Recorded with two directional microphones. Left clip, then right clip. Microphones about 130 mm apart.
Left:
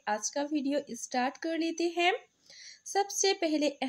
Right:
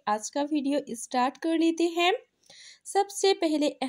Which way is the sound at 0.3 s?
25° right (ahead or behind).